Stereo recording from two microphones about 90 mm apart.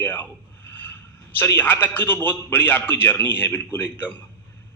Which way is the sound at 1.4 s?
20° left (ahead or behind).